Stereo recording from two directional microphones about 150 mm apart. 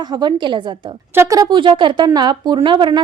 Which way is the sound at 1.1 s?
20° right (ahead or behind).